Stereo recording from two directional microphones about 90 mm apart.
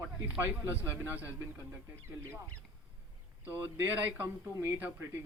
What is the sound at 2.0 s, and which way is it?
Speech, 30° right (ahead or behind).